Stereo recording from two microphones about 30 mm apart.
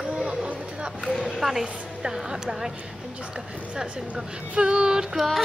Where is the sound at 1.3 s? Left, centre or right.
Centre.